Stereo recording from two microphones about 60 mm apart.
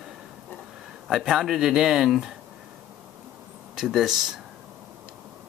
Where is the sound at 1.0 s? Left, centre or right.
Centre.